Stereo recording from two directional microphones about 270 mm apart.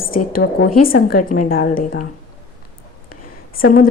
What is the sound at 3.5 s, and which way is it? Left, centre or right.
Speech, left.